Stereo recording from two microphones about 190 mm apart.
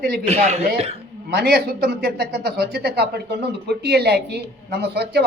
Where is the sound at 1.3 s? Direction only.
55° right (ahead or behind).